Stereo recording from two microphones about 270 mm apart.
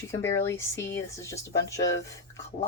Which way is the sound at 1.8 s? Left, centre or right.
Left.